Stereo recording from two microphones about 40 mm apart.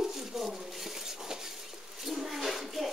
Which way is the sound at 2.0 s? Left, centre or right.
Centre.